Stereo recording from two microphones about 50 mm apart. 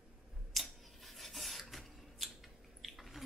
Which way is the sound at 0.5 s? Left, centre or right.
Centre.